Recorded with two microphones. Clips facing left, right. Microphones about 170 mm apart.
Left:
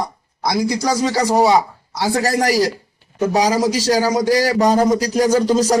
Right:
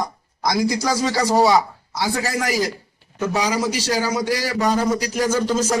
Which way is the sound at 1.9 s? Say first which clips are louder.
Left 5 dB; 35° left (ahead or behind).